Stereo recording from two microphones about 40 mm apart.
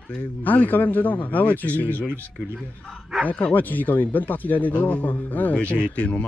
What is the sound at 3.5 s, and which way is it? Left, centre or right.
A man's voice, left.